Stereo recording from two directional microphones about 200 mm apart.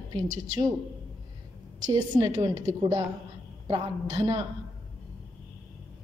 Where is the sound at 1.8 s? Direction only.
20° right (ahead or behind).